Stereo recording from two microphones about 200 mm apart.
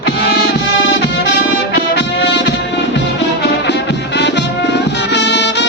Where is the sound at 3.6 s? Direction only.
60° left (ahead or behind).